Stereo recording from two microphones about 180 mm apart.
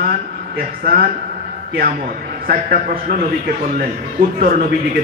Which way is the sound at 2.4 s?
55° right (ahead or behind).